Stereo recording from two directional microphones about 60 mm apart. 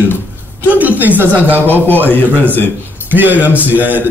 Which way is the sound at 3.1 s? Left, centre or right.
Right.